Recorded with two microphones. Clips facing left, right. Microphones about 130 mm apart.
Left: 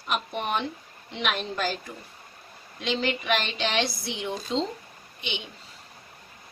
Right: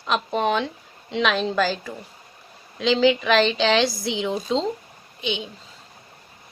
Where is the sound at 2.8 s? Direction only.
90° right.